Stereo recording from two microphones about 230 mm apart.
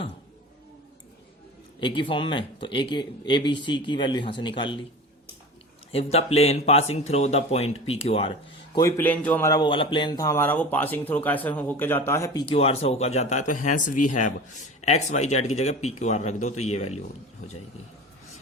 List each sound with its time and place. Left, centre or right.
1.8 s speech: left
5.9 s speech: left
8.7 s speech: centre; by 17.0 s left